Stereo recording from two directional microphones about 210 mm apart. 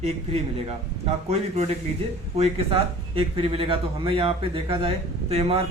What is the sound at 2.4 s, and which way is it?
Speech, 25° right (ahead or behind).